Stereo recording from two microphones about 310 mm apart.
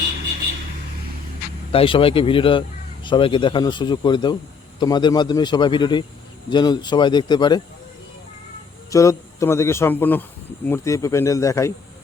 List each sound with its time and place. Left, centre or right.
1.7 s speech: centre
8.9 s speech: centre